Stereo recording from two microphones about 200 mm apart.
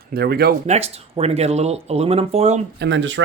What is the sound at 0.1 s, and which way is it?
Speech, 50° right (ahead or behind).